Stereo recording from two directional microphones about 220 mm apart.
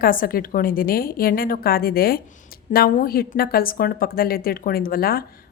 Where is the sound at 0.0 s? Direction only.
40° left (ahead or behind).